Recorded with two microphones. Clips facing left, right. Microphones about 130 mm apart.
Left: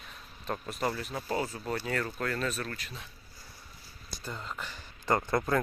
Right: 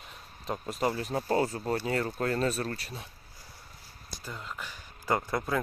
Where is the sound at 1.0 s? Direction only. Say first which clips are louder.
Right 5 dB; 40° right (ahead or behind).